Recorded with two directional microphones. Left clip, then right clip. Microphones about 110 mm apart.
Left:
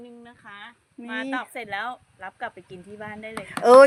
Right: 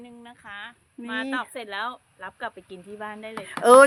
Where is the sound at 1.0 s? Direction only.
15° right (ahead or behind).